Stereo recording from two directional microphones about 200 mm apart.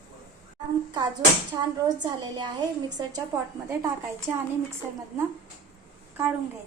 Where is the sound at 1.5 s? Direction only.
20° right (ahead or behind).